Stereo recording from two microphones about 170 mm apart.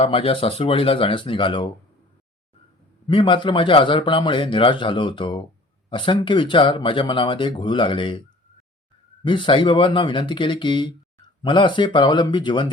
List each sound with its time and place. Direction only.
0.0 s speech: 35° left (ahead or behind)
3.1 s speech: 30° left (ahead or behind)
9.2 s speech: 30° left (ahead or behind)